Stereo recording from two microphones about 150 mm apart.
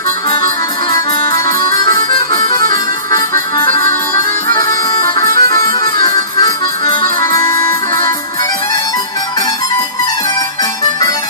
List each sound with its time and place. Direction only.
1.6 s music: 30° left (ahead or behind)